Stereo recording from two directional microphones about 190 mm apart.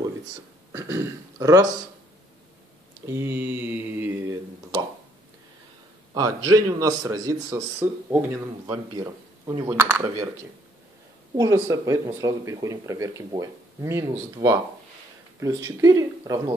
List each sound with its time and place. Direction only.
0.7 s speech: 15° right (ahead or behind)
3.1 s speech: 10° right (ahead or behind)
6.1 s speech: 20° right (ahead or behind)
8.9 s speech: 25° right (ahead or behind)
9.7 s speech: 10° right (ahead or behind)
11.3 s speech: 15° right (ahead or behind)